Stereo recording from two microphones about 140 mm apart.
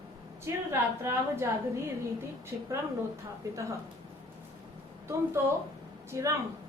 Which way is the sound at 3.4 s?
25° right (ahead or behind).